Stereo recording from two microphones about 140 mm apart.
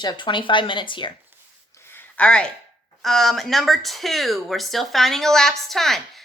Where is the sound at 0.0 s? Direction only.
30° left (ahead or behind).